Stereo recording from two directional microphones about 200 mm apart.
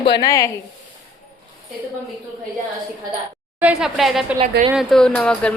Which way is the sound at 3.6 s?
5° right (ahead or behind).